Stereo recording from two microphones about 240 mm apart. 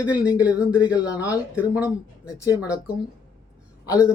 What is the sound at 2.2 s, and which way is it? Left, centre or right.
Speech, centre.